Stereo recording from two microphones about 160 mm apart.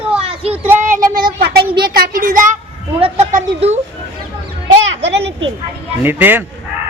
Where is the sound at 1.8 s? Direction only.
60° right (ahead or behind).